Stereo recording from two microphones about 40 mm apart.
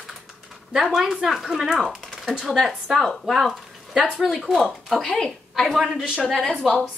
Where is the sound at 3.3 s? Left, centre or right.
Centre.